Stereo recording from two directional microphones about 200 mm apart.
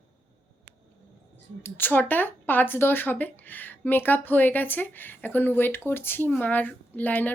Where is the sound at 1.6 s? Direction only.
10° left (ahead or behind).